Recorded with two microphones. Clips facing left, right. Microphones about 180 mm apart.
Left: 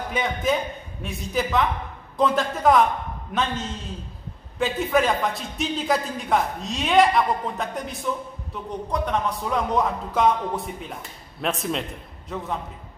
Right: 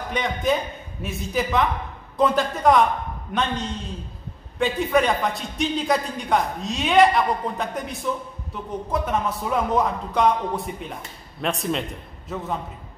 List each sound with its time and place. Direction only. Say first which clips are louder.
0.1 s a man's voice: right 1 dB; centre (ahead or behind)